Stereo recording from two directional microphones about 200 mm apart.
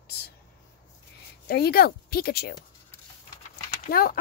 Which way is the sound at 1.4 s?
50° left (ahead or behind).